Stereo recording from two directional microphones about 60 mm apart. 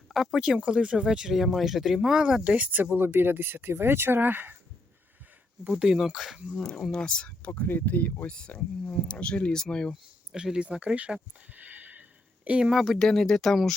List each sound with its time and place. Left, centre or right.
0.1 s speech: centre; by 4.5 s right
5.7 s speech: centre
6.6 s speech: centre; by 8.3 s left
8.3 s speech: centre
9.9 s speech: centre
12.7 s speech: centre
13.0 s speech: centre